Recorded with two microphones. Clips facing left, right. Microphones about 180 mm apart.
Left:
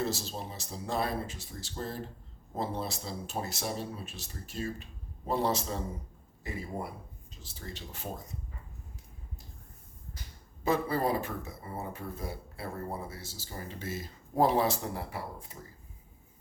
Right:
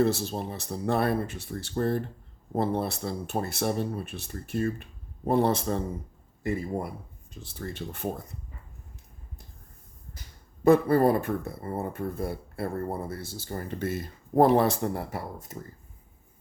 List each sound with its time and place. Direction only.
0.0 s speech: 60° right (ahead or behind)
7.4 s speech: 55° right (ahead or behind)
10.6 s speech: 55° right (ahead or behind)